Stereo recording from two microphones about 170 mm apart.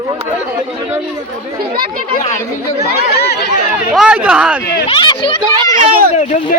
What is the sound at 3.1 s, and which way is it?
Speech, 70° left (ahead or behind).